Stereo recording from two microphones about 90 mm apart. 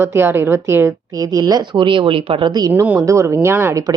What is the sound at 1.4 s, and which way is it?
Speech, 55° right (ahead or behind).